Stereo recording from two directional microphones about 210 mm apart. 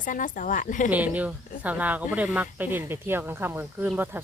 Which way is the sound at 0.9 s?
5° right (ahead or behind).